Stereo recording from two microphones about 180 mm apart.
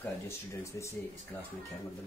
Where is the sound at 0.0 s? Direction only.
15° left (ahead or behind).